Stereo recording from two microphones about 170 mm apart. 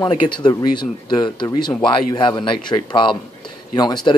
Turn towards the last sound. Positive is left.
turn(degrees=25)  # may be behind; listen again after turning